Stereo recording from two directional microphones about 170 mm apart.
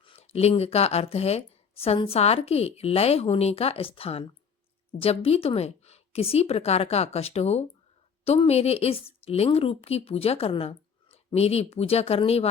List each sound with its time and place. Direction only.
0.0 s speech: 35° left (ahead or behind)